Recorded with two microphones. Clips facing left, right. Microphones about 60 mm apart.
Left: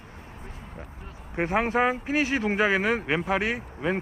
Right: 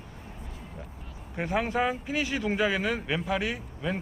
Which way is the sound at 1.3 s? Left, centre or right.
Left.